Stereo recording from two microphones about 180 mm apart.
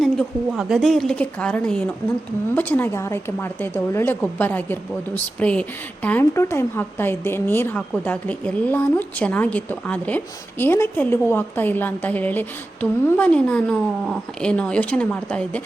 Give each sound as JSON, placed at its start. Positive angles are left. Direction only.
{"t": 0.0, "sound": "a woman's voice", "side_deg": 0}